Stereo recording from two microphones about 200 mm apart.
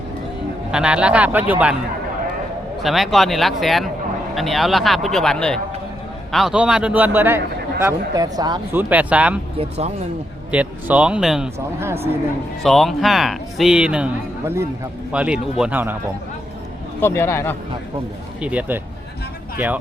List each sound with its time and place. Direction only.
0.7 s a man's voice: 5° right (ahead or behind)
2.8 s a man's voice: centre (ahead or behind); by 8.6 s 20° right (ahead or behind)
8.7 s a man's voice: 10° right (ahead or behind)
9.6 s speech: 30° right (ahead or behind)
10.5 s a man's voice: 5° right (ahead or behind)
17.0 s speech: 15° left (ahead or behind)
18.3 s a man's voice: 5° right (ahead or behind)